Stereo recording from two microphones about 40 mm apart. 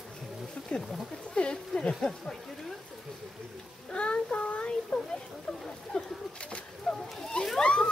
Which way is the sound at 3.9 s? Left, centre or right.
Left.